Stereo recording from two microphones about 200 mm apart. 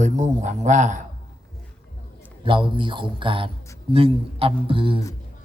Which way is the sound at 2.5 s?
25° right (ahead or behind).